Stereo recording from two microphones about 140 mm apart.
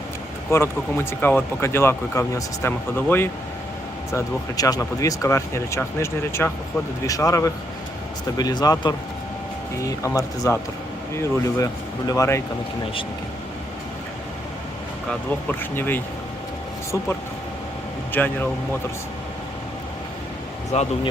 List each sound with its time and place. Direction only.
0.5 s speech: 20° left (ahead or behind)
15.4 s speech: 15° left (ahead or behind)
18.1 s speech: 15° left (ahead or behind)
20.7 s speech: 50° left (ahead or behind)